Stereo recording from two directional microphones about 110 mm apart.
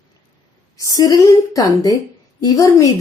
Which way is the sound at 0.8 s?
35° left (ahead or behind).